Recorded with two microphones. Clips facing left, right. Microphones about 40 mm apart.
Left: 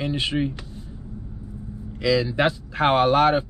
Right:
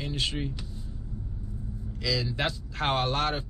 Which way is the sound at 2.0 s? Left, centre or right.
Left.